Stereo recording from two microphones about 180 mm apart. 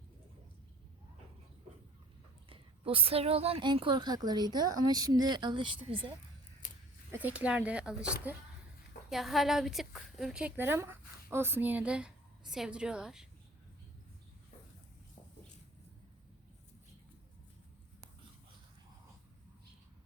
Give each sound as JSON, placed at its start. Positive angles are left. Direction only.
{"t": 2.5, "sound": "a woman's voice", "side_deg": -30}
{"t": 7.1, "sound": "a woman's voice", "side_deg": -10}